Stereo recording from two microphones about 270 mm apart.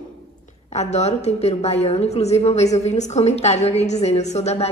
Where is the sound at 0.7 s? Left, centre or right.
Left.